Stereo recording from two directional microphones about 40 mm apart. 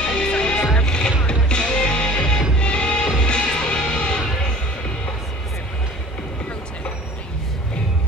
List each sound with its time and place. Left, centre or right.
0.0 s music: left